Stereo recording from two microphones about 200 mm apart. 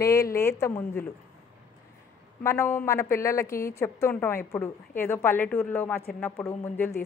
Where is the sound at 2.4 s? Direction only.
15° left (ahead or behind).